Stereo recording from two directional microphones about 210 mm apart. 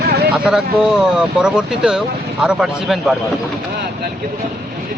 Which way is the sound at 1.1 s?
5° right (ahead or behind).